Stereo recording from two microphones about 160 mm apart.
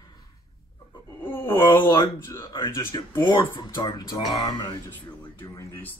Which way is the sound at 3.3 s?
30° left (ahead or behind).